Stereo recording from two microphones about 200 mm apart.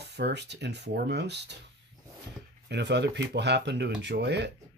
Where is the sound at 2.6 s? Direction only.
60° right (ahead or behind).